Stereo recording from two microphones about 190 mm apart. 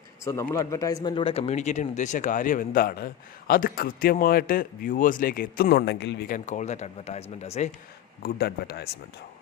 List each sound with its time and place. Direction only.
0.3 s a man's voice: 15° left (ahead or behind); by 7.7 s 35° left (ahead or behind)
8.2 s speech: 55° left (ahead or behind)